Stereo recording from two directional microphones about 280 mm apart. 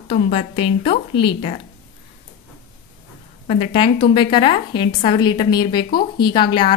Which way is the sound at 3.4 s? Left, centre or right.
Left.